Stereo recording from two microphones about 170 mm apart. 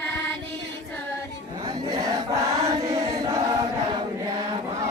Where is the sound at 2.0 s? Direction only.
15° right (ahead or behind).